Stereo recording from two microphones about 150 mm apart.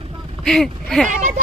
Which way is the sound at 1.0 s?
60° right (ahead or behind).